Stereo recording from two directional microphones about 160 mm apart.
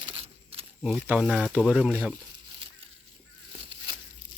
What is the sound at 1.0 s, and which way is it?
Speech, 5° right (ahead or behind).